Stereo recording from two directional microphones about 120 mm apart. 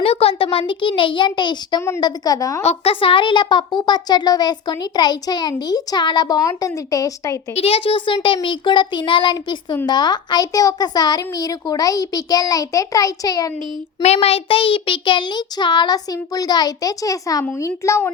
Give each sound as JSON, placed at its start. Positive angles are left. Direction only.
{"t": 0.0, "sound": "a sound", "side_deg": 55}
{"t": 0.7, "sound": "a child's voice", "side_deg": 45}
{"t": 2.6, "sound": "a child's voice", "side_deg": 50}
{"t": 7.5, "sound": "a child's voice", "side_deg": 60}
{"t": 14.0, "sound": "a child's voice", "side_deg": 60}